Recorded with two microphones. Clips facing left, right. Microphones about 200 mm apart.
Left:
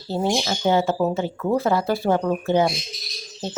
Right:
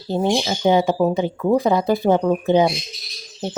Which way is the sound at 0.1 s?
15° right (ahead or behind).